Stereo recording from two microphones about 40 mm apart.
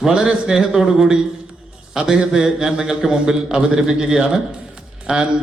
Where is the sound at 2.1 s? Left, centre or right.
Centre.